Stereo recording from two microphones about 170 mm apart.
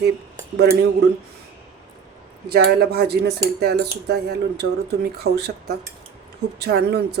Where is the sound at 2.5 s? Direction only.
70° right (ahead or behind).